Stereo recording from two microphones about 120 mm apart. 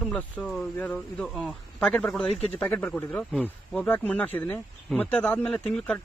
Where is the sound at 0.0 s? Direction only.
10° left (ahead or behind).